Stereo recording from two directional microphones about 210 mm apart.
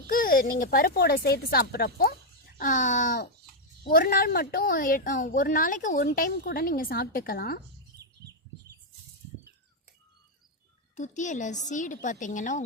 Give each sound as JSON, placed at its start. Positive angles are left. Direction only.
{"t": 0.1, "sound": "a woman's voice", "side_deg": 45}
{"t": 2.6, "sound": "a woman's voice", "side_deg": 40}
{"t": 10.9, "sound": "a woman's voice", "side_deg": 35}